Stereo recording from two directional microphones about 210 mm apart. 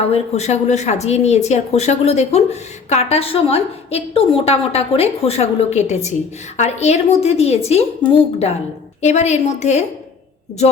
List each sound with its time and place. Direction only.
0.0 s a woman's voice: 30° left (ahead or behind)